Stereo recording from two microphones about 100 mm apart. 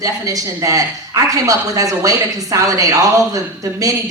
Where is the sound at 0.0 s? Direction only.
35° right (ahead or behind).